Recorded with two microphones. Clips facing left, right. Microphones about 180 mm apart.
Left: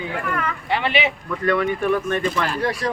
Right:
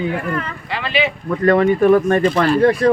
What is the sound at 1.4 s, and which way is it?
Speech, 45° right (ahead or behind).